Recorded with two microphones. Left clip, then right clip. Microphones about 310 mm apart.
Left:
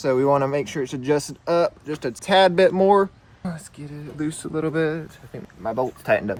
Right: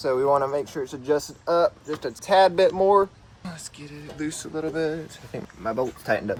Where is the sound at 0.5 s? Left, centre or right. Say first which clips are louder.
Left 3 dB; left.